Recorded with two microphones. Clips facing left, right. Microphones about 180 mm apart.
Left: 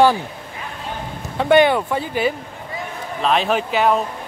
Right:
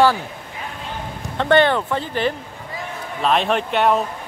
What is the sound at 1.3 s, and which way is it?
Speech, 10° left (ahead or behind).